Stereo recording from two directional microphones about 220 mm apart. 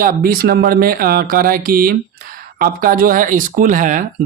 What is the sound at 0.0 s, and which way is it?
Speech, 40° right (ahead or behind).